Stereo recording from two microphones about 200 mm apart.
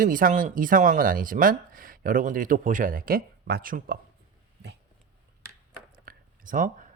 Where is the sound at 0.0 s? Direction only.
45° right (ahead or behind).